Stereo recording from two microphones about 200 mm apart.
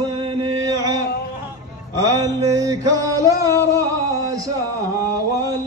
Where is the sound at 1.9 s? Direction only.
15° right (ahead or behind).